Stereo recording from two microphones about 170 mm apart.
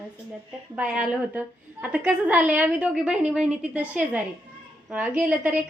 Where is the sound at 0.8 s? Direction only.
5° right (ahead or behind).